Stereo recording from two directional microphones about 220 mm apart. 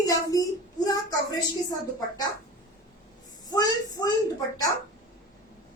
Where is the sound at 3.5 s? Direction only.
15° left (ahead or behind).